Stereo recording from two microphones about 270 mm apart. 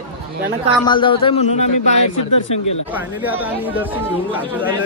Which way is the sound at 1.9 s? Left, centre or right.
Left.